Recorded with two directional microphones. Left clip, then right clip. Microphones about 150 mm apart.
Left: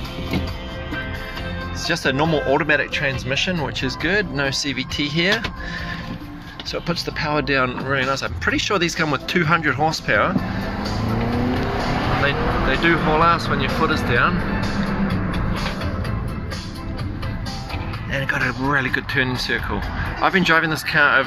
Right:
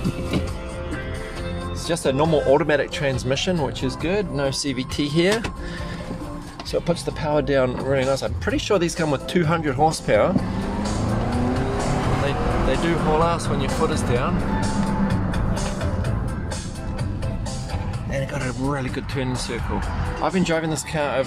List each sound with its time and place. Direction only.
1.9 s speech: 15° right (ahead or behind)
2.6 s speech: 35° right (ahead or behind)
3.6 s speech: 15° right (ahead or behind)
4.5 s speech: 30° right (ahead or behind)
6.9 s speech: 20° right (ahead or behind)
12.3 s speech: 10° right (ahead or behind)
18.1 s speech: 15° right (ahead or behind)